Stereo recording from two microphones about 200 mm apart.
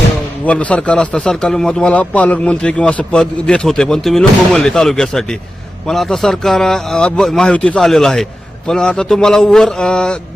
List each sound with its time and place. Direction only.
0.4 s a man's voice: 5° left (ahead or behind)